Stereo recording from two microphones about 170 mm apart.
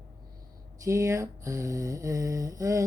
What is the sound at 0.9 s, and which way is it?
Mantra, 20° right (ahead or behind).